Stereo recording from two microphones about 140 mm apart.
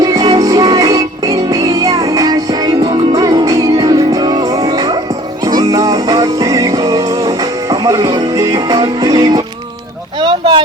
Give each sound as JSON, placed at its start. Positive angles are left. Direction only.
{"t": 0.0, "sound": "music", "side_deg": -25}
{"t": 10.2, "sound": "boat", "side_deg": -35}